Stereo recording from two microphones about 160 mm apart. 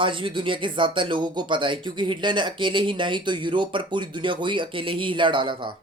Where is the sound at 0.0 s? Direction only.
30° right (ahead or behind).